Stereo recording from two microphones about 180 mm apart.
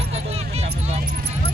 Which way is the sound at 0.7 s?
35° right (ahead or behind).